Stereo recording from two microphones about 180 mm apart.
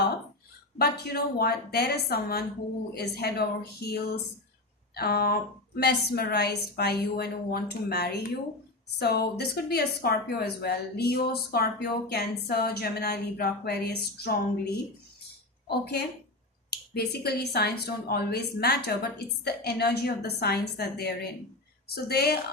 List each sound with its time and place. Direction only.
0.8 s speech: 65° left (ahead or behind)